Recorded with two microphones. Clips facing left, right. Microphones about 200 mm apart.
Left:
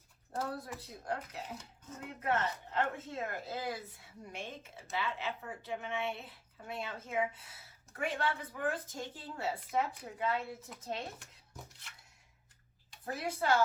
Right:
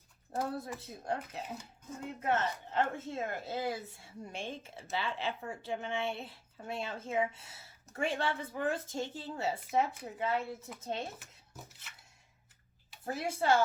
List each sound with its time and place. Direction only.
0.3 s speech: 25° right (ahead or behind)
11.2 s a sound: 5° right (ahead or behind)
13.1 s speech: 25° right (ahead or behind)